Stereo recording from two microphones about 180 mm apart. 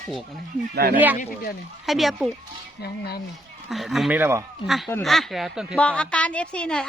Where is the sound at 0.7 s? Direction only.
60° right (ahead or behind).